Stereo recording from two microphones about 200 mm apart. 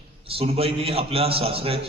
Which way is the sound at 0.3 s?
30° right (ahead or behind).